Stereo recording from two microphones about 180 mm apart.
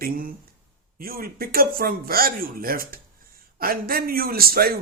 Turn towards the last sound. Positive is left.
turn(degrees=-55)  # may be behind; listen again after turning